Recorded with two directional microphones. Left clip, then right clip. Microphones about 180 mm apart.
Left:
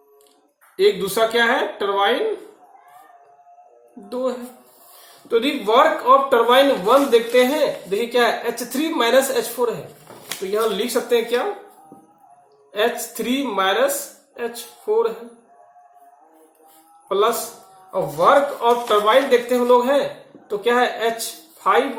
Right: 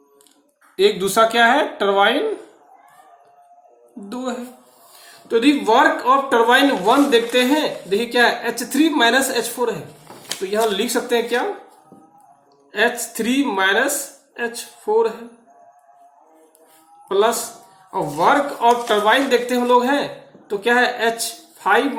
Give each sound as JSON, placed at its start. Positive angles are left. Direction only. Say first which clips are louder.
{"t": 0.8, "sound": "speech", "louder": "right 2 dB", "side_deg": -60}
{"t": 4.1, "sound": "music", "louder": "left 4 dB", "side_deg": -60}
{"t": 5.3, "sound": "speech", "louder": "right 2 dB", "side_deg": -60}
{"t": 10.5, "sound": "speech", "louder": "right 1 dB", "side_deg": -60}
{"t": 12.7, "sound": "speech", "louder": "right 2 dB", "side_deg": -55}
{"t": 17.1, "sound": "speech", "louder": "right 1 dB", "side_deg": -55}